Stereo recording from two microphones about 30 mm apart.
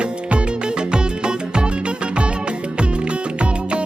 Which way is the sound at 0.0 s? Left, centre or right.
Right.